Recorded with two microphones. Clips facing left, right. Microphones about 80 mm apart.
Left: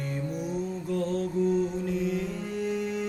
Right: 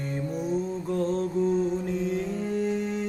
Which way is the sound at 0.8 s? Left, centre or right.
Right.